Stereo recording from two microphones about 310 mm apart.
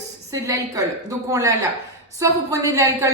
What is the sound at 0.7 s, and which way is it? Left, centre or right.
A woman's voice, centre.